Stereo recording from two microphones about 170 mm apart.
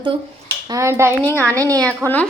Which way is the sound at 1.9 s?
10° left (ahead or behind).